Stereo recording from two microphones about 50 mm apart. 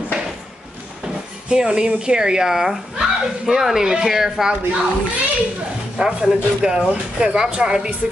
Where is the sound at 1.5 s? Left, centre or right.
Centre.